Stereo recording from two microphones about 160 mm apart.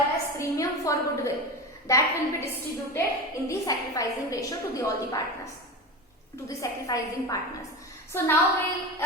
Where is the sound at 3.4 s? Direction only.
20° left (ahead or behind).